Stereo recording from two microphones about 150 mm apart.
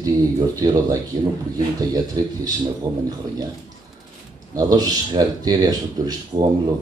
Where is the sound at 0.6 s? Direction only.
25° right (ahead or behind).